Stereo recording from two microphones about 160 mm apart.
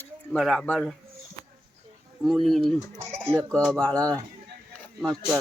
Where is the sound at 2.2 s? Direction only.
Centre (ahead or behind).